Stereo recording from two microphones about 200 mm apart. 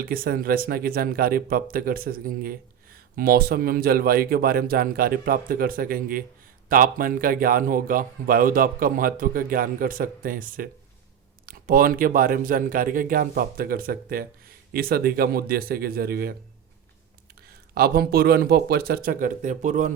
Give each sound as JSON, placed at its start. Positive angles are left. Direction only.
{"t": 0.0, "sound": "speech", "side_deg": -50}
{"t": 17.7, "sound": "speech", "side_deg": -50}